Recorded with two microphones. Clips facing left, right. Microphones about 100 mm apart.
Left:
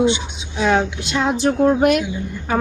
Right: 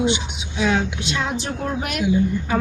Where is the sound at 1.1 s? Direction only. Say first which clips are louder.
Left 10 dB; 45° left (ahead or behind).